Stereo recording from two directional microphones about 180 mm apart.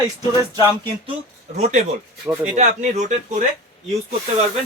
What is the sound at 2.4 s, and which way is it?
Speech, 40° right (ahead or behind).